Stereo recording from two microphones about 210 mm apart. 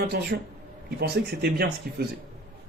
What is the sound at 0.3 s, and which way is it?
Speech, 55° right (ahead or behind).